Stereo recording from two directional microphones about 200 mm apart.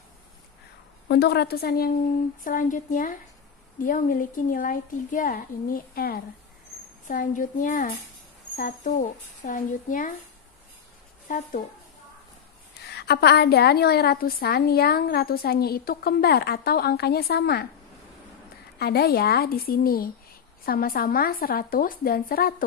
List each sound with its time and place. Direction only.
1.0 s a woman's voice: 55° left (ahead or behind)
11.2 s a woman's voice: 40° left (ahead or behind)
12.7 s a woman's voice: 55° left (ahead or behind)
18.8 s a woman's voice: 50° left (ahead or behind)